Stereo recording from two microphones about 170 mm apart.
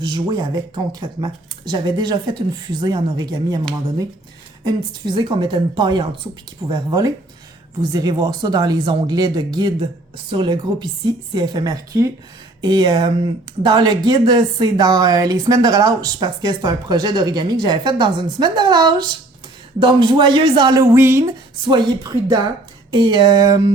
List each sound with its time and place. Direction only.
0.0 s speech: 25° right (ahead or behind)
4.6 s speech: 25° right (ahead or behind)
20.9 s speech: 15° right (ahead or behind)
21.6 s speech: 25° right (ahead or behind)